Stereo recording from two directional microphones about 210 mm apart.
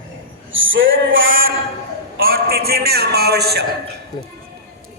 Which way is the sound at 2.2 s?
45° right (ahead or behind).